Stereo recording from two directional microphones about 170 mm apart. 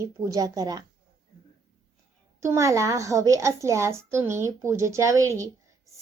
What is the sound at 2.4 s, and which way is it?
A woman's voice, 15° right (ahead or behind).